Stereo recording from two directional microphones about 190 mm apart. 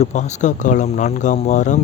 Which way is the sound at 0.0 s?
35° left (ahead or behind).